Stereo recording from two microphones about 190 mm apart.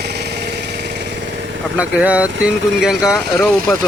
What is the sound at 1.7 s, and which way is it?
Speech, 5° right (ahead or behind).